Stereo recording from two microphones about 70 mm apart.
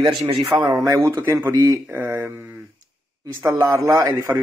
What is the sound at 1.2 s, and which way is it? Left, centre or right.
Speech, right.